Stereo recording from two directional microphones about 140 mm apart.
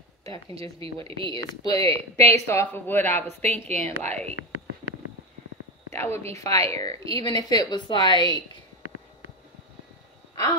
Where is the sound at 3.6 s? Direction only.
55° right (ahead or behind).